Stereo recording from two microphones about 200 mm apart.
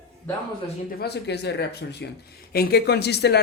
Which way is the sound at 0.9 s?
55° left (ahead or behind).